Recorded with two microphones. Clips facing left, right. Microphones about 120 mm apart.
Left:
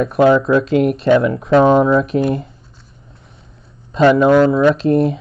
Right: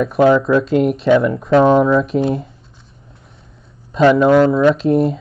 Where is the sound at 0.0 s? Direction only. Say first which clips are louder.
Even; centre (ahead or behind).